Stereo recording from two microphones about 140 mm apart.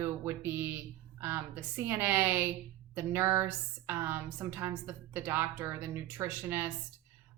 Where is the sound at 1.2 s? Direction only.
15° right (ahead or behind).